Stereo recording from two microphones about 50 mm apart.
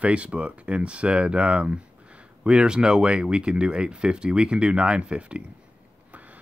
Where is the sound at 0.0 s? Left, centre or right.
Right.